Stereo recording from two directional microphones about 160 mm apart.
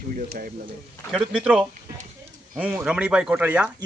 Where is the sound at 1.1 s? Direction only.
5° right (ahead or behind).